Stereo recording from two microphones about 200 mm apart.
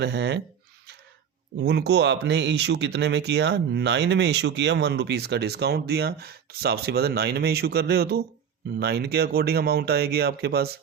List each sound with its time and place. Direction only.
0.0 s speech: 60° right (ahead or behind)
1.6 s speech: 60° right (ahead or behind)